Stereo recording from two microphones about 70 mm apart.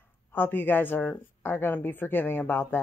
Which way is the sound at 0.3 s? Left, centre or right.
Left.